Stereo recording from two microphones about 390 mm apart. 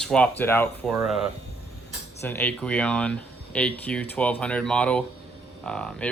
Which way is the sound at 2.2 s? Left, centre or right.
Centre.